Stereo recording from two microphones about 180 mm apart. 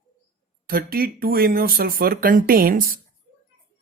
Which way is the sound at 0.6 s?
55° right (ahead or behind).